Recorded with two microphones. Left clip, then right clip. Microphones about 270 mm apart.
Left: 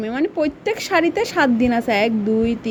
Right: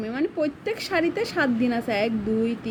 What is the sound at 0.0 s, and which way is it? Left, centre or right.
A woman's voice, centre.